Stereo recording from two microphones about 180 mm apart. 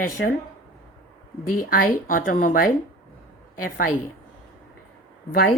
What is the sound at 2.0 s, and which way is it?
Speech, 50° left (ahead or behind).